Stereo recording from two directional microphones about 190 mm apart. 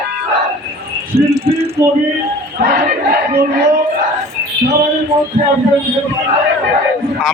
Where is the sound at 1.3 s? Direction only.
55° right (ahead or behind).